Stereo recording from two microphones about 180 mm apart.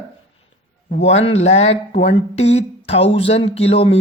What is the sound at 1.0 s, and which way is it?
Speech, 35° left (ahead or behind).